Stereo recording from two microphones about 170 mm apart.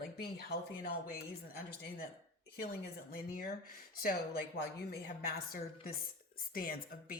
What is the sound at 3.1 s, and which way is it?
A woman's voice, 60° left (ahead or behind).